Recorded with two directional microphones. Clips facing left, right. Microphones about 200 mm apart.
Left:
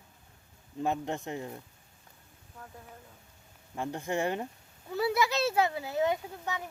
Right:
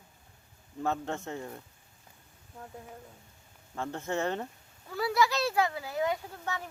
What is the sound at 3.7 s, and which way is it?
Speech, 15° left (ahead or behind).